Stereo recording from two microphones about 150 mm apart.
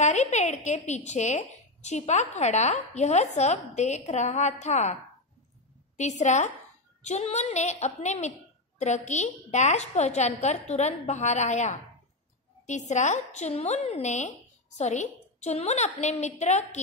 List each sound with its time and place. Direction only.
0.0 s speech: 50° left (ahead or behind)
5.9 s speech: 50° left (ahead or behind)